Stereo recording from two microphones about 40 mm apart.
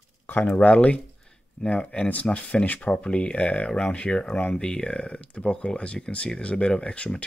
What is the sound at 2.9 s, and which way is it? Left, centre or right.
Speech, left.